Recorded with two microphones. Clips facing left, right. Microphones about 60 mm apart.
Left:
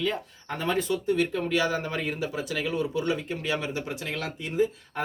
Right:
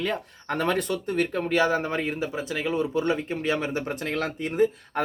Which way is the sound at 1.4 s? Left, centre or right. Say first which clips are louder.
Right 3 dB; right.